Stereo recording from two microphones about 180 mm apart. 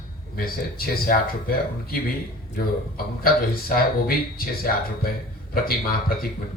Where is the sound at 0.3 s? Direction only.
55° left (ahead or behind).